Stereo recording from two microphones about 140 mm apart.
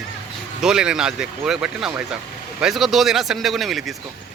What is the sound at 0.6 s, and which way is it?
Speech, 5° right (ahead or behind).